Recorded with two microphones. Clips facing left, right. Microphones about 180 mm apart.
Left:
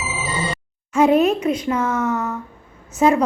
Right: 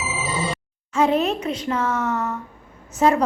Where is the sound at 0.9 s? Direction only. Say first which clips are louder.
Left 5 dB; 10° left (ahead or behind).